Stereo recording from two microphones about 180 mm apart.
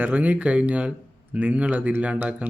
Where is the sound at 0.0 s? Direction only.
10° right (ahead or behind).